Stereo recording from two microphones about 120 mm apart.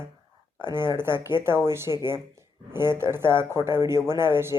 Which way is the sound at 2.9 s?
20° right (ahead or behind).